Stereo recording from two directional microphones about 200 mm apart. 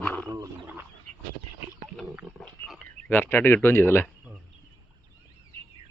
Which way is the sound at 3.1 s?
10° left (ahead or behind).